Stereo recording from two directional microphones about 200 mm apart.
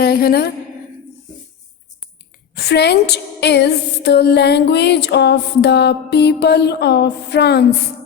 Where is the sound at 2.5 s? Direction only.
55° left (ahead or behind).